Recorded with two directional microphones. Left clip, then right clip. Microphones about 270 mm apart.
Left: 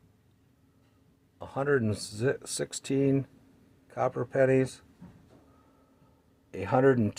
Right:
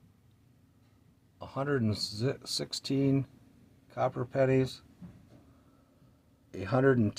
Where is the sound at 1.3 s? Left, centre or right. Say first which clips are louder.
Left 5 dB; centre.